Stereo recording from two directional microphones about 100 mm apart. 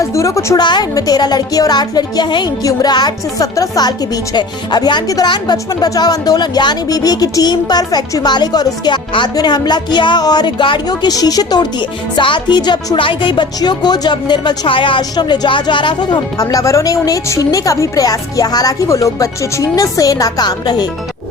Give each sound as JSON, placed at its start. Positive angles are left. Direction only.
{"t": 0.0, "sound": "a woman's voice", "side_deg": 30}
{"t": 0.6, "sound": "speech", "side_deg": 45}
{"t": 16.4, "sound": "a woman's voice", "side_deg": 35}